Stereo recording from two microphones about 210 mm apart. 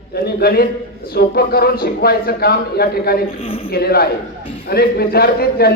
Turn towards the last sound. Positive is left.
turn(degrees=45)  # may be behind; listen again after turning